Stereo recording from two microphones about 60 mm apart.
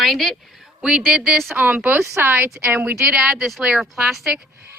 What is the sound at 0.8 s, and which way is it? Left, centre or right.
Speech, centre.